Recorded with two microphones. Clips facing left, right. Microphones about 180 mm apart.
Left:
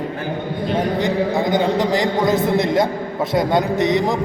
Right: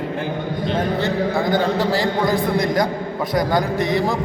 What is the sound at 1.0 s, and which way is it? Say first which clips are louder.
A man's voice: left 2 dB; 15° left (ahead or behind).